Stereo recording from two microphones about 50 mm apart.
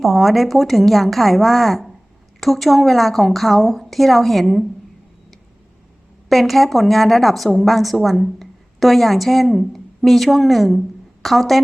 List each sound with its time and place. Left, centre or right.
0.0 s a woman's voice: centre
6.2 s speech: centre